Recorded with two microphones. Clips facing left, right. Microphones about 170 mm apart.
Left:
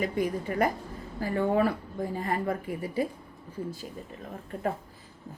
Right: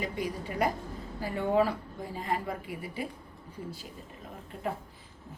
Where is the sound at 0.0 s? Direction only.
50° left (ahead or behind).